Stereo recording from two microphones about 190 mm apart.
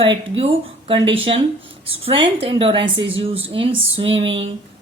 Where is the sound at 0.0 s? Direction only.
30° right (ahead or behind).